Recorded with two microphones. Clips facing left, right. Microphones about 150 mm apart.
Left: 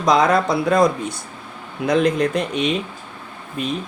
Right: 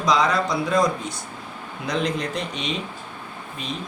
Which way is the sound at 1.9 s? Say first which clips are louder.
Left 8 dB; 55° left (ahead or behind).